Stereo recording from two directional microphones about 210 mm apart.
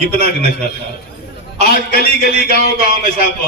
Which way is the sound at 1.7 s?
45° left (ahead or behind).